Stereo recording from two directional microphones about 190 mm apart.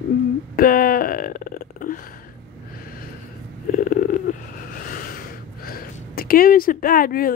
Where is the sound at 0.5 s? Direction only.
50° left (ahead or behind).